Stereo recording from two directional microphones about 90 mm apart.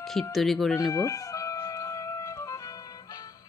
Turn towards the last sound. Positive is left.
turn(degrees=40)  # may be behind; listen again after turning